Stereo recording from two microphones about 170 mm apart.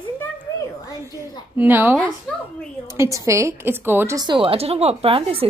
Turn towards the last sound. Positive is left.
turn(degrees=-35)  # may be behind; listen again after turning